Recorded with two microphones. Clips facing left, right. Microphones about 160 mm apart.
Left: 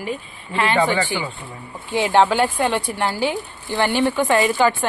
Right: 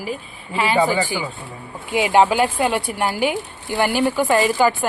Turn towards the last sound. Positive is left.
turn(degrees=-5)  # may be behind; listen again after turning